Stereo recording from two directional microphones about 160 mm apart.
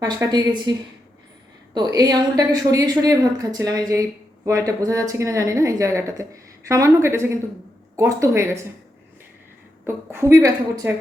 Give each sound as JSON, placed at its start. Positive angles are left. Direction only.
{"t": 0.0, "sound": "a woman's voice", "side_deg": -25}
{"t": 1.7, "sound": "a woman's voice", "side_deg": -25}
{"t": 9.8, "sound": "a woman's voice", "side_deg": -15}